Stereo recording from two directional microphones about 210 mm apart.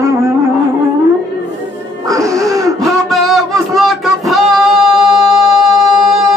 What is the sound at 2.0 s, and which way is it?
Wheeze, 15° right (ahead or behind).